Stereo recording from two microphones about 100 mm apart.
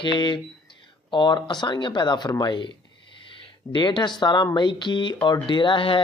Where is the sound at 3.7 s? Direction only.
50° left (ahead or behind).